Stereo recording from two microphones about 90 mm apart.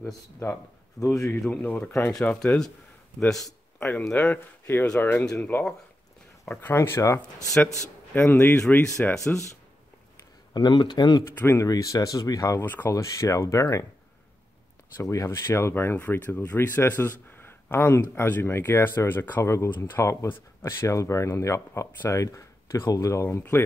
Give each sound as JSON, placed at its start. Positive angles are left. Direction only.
{"t": 0.4, "sound": "speech", "side_deg": 30}
{"t": 1.4, "sound": "speech", "side_deg": 15}
{"t": 6.6, "sound": "speech", "side_deg": 25}
{"t": 8.1, "sound": "speech", "side_deg": 20}
{"t": 9.1, "sound": "speech", "side_deg": 5}
{"t": 10.5, "sound": "speech", "side_deg": 55}
{"t": 11.2, "sound": "speech", "side_deg": 30}
{"t": 12.6, "sound": "speech", "side_deg": 20}
{"t": 12.9, "sound": "speech", "side_deg": 35}
{"t": 15.0, "sound": "speech", "side_deg": 30}